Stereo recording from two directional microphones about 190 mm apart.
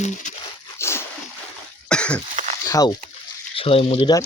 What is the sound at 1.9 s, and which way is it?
Cough, 5° left (ahead or behind).